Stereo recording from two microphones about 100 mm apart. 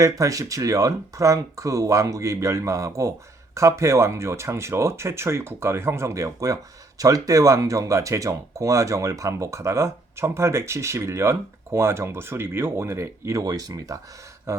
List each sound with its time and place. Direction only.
0.0 s speech: 35° right (ahead or behind)